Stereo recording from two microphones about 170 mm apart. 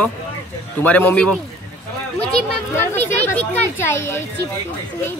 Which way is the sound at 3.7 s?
15° left (ahead or behind).